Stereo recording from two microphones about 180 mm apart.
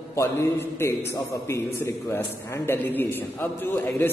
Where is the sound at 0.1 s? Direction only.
15° left (ahead or behind).